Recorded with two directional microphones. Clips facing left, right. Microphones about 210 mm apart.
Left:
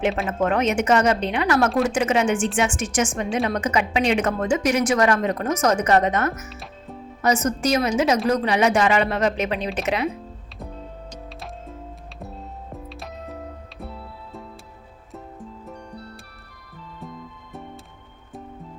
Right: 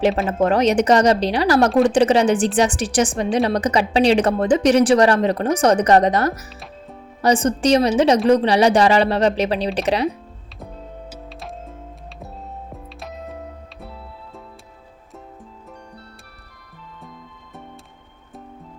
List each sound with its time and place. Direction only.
0.3 s a woman's voice: 35° right (ahead or behind)
11.1 s music: centre (ahead or behind)
12.7 s music: centre (ahead or behind)
15.6 s music: centre (ahead or behind)